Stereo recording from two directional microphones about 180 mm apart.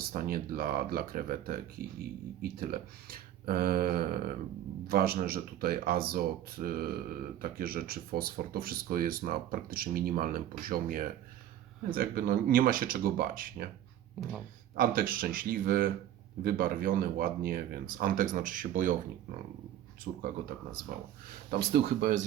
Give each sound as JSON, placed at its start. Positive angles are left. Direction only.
{"t": 0.0, "sound": "speech", "side_deg": -55}
{"t": 14.2, "sound": "speech", "side_deg": 0}
{"t": 14.8, "sound": "speech", "side_deg": -50}
{"t": 20.1, "sound": "speech", "side_deg": -50}
{"t": 21.5, "sound": "speech", "side_deg": -60}